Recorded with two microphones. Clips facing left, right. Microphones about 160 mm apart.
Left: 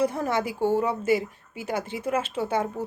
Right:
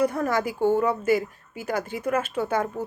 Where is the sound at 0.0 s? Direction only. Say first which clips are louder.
Right 1 dB; 25° left (ahead or behind).